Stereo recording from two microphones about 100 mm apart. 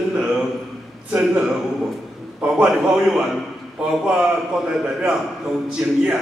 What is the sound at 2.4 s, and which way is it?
A man's voice, 5° right (ahead or behind).